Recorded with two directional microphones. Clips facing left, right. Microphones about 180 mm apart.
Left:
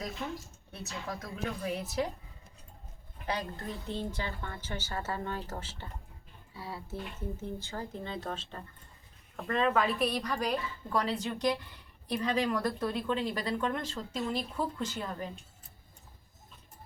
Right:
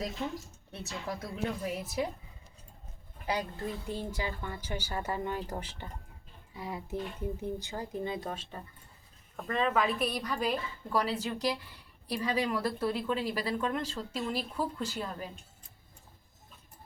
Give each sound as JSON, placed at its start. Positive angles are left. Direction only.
{"t": 0.2, "sound": "speech", "side_deg": -20}
{"t": 1.6, "sound": "speech", "side_deg": -10}
{"t": 3.8, "sound": "a woman's voice", "side_deg": -10}